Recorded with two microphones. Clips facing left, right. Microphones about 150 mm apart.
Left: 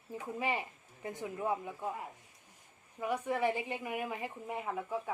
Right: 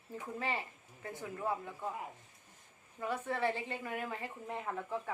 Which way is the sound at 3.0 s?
15° left (ahead or behind).